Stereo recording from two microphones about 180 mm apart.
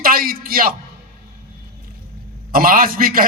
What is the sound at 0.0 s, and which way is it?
Speech, 55° right (ahead or behind).